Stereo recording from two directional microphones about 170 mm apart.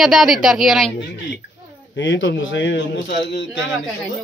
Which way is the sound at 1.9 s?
90° left.